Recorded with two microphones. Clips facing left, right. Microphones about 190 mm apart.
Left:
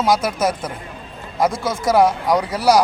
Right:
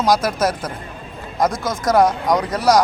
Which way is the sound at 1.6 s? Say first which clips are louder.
Even; 10° left (ahead or behind).